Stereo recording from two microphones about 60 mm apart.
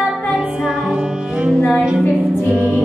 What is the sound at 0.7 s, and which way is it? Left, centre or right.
Music, centre.